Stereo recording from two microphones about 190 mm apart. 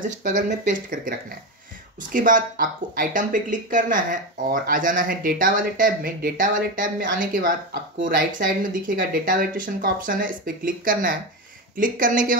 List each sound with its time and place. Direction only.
0.2 s speech: 40° right (ahead or behind)
2.1 s speech: 45° right (ahead or behind)